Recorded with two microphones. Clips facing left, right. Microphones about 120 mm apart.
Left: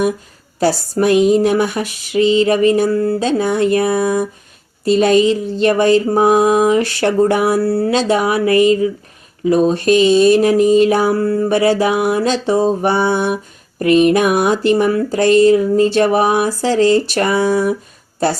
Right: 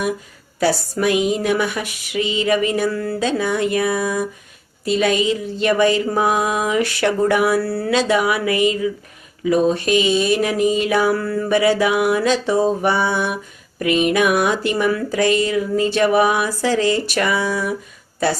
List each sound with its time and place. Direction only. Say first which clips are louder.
0.6 s mantra: left 3 dB; 35° left (ahead or behind)